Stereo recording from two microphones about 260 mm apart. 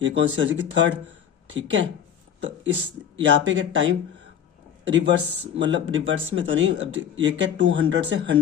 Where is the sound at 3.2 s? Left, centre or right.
Right.